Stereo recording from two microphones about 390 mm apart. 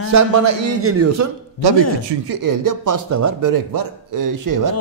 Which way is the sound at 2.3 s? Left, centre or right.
Right.